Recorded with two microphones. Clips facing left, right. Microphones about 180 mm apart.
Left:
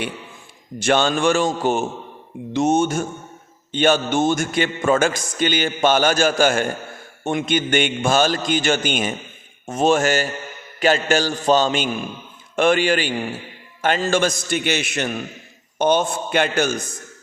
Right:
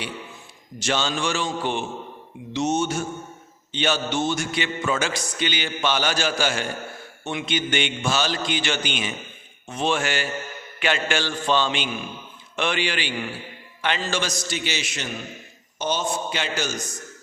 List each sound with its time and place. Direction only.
0.8 s a man's voice: 55° left (ahead or behind)